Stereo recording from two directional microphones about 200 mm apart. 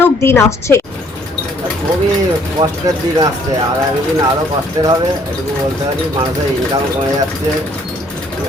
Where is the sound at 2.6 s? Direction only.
20° right (ahead or behind).